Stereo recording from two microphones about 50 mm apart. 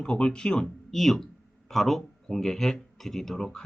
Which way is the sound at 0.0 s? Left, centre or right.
Centre.